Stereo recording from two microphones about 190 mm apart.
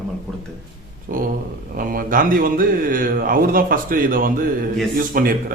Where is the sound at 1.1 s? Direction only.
45° right (ahead or behind).